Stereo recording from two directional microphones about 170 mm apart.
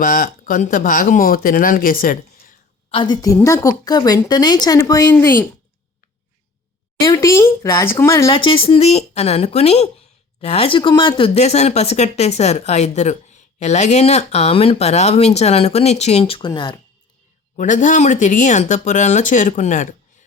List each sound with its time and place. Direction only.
0.0 s speech: 50° left (ahead or behind)
2.9 s speech: 25° left (ahead or behind)
7.0 s speech: 20° left (ahead or behind)
8.4 s speech: 30° left (ahead or behind)
17.6 s speech: 50° left (ahead or behind)